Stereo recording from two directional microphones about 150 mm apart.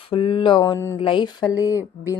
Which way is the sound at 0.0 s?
35° left (ahead or behind).